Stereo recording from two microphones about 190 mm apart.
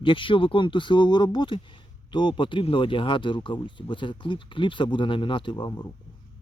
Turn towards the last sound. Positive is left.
turn(degrees=25)  # may be behind; listen again after turning